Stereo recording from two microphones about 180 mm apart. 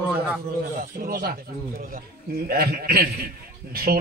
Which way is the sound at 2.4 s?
60° right (ahead or behind).